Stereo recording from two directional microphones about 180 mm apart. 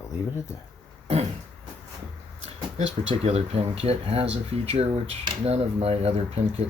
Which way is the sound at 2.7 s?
35° right (ahead or behind).